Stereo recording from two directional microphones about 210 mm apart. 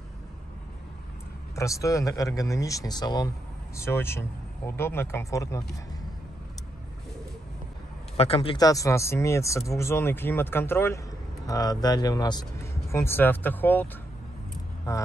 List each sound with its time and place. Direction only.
1.5 s speech: 15° left (ahead or behind)
8.2 s speech: 30° left (ahead or behind); by 13.8 s 10° left (ahead or behind)
14.9 s speech: 15° left (ahead or behind)